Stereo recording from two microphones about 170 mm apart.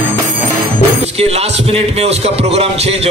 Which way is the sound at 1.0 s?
40° right (ahead or behind).